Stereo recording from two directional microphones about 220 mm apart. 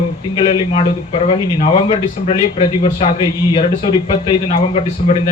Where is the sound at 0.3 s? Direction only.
25° left (ahead or behind).